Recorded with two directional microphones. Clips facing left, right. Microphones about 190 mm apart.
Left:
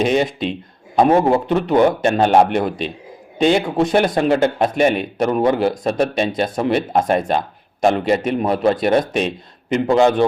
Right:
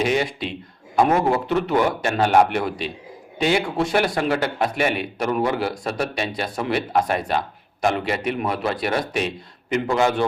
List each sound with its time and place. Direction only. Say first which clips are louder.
0.0 s a man's voice: left 5 dB; 25° left (ahead or behind)
8.0 s a man's voice: left 6 dB; 45° left (ahead or behind)
8.8 s a man's voice: left 7 dB; 25° left (ahead or behind)